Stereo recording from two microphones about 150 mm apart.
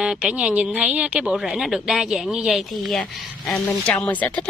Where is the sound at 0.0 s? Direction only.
5° right (ahead or behind).